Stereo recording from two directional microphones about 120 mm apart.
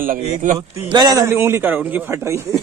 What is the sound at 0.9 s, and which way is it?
Speech, 35° right (ahead or behind).